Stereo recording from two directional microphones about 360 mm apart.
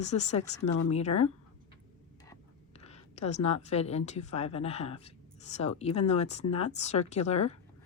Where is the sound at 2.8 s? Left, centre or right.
Centre.